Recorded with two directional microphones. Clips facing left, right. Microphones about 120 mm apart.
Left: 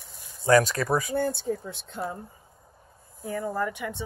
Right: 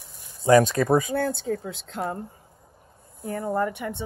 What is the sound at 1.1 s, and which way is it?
Speech, 70° right (ahead or behind).